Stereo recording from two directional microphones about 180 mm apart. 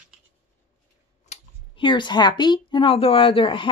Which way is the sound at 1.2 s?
30° left (ahead or behind).